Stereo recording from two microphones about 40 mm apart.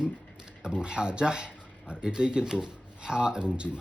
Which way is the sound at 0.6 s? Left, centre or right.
Right.